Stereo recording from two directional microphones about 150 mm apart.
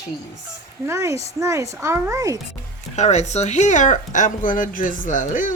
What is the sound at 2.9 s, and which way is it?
Speech, 50° left (ahead or behind).